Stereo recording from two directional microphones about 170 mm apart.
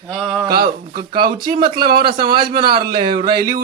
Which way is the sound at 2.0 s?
30° right (ahead or behind).